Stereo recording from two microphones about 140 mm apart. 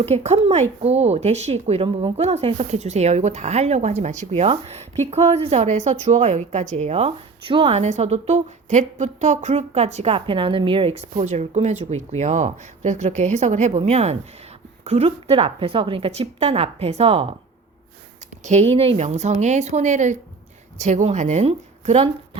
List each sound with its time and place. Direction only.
0.0 s speech: 50° right (ahead or behind)
4.3 s speech: 45° right (ahead or behind)
18.4 s speech: 50° right (ahead or behind)